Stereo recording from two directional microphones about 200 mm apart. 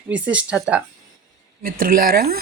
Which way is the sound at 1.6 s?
45° right (ahead or behind).